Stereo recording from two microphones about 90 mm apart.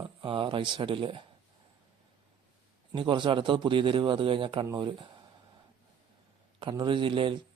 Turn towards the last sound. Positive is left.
turn(degrees=-70)  # may be behind; listen again after turning